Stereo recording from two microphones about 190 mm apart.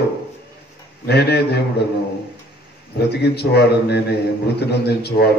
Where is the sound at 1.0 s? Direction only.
60° left (ahead or behind).